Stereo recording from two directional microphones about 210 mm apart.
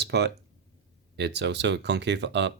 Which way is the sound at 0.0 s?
50° right (ahead or behind).